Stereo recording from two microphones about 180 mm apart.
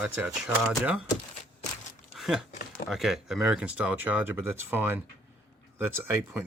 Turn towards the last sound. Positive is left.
turn(degrees=-10)  # may be behind; listen again after turning